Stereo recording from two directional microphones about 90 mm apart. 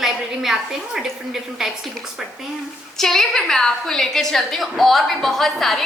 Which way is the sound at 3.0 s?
5° left (ahead or behind).